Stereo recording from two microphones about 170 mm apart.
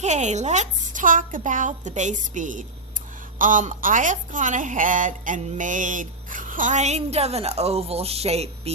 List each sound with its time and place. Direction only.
0.0 s a woman's voice: 45° right (ahead or behind)